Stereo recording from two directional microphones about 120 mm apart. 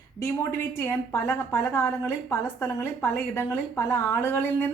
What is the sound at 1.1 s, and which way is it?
A woman's voice, 20° left (ahead or behind).